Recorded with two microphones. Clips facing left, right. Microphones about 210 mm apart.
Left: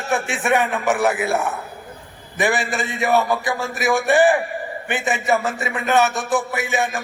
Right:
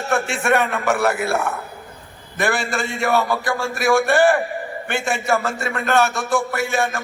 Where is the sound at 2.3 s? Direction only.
15° left (ahead or behind).